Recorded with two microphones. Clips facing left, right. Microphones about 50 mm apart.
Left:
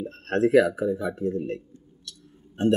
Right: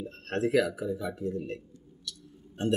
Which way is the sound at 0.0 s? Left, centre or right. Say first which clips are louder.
Left 7 dB; left.